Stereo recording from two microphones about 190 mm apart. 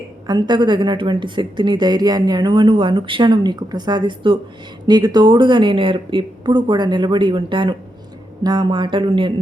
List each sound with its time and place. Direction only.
0.3 s speech: 25° right (ahead or behind)